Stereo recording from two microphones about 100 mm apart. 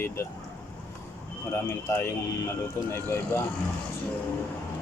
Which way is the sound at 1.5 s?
25° left (ahead or behind).